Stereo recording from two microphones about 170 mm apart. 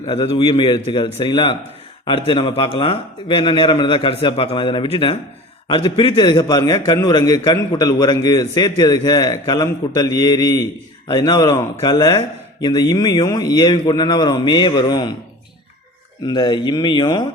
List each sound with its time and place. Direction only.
0.1 s a man's voice: 25° left (ahead or behind)
16.2 s a man's voice: 25° left (ahead or behind)